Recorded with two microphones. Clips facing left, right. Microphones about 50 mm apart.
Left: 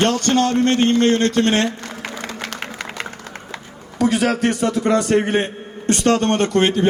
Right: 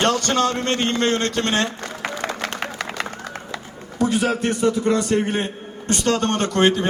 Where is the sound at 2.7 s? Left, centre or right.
Centre.